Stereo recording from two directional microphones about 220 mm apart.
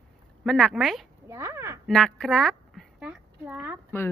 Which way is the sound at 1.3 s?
10° right (ahead or behind).